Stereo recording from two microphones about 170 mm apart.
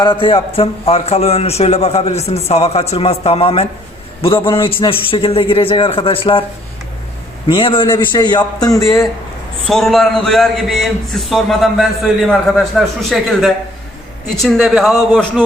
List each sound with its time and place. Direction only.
0.0 s a man's voice: 25° left (ahead or behind)
7.4 s a man's voice: 30° left (ahead or behind)
9.6 s a man's voice: centre (ahead or behind)